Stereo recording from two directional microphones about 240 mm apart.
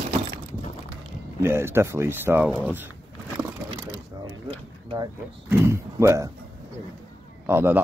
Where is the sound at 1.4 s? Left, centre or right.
Centre.